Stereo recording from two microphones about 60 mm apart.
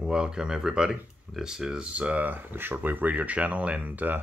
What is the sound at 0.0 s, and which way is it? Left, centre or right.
Speech, centre.